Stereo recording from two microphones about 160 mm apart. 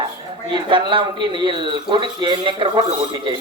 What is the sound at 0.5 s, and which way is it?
Speech, 30° right (ahead or behind).